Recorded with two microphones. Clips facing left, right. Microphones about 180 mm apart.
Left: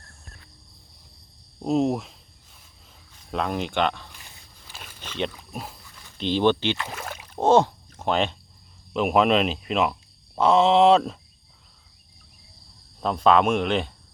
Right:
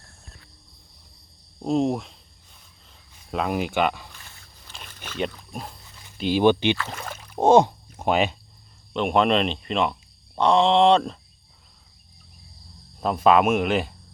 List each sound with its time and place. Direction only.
1.5 s speech: centre (ahead or behind)
3.2 s cricket: 5° right (ahead or behind)
4.2 s a sound: 15° left (ahead or behind)
4.7 s a sound: 5° left (ahead or behind)
4.9 s a sound: 10° right (ahead or behind)
5.3 s dog: 5° left (ahead or behind)
6.2 s cricket: 10° right (ahead or behind)
6.9 s speech: 5° left (ahead or behind)
7.3 s speech: 15° right (ahead or behind)
8.9 s speech: 5° left (ahead or behind)
13.0 s cricket: 5° right (ahead or behind)